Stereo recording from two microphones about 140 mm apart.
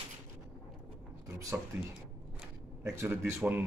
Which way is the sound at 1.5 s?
10° right (ahead or behind).